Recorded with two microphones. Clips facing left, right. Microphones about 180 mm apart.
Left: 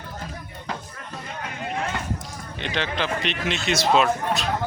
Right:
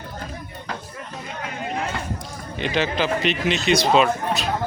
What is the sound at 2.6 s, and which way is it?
A man's voice, 5° right (ahead or behind).